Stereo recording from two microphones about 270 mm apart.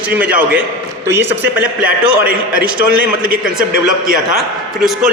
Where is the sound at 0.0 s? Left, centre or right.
Centre.